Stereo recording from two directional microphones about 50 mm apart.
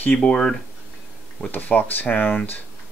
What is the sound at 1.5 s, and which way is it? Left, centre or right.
Speech, left.